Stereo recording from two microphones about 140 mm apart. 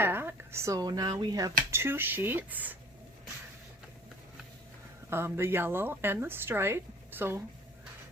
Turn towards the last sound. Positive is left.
turn(degrees=-15)  # may be behind; listen again after turning